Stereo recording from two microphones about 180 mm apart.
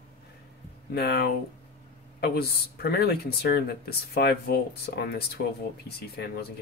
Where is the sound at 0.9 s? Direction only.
65° left (ahead or behind).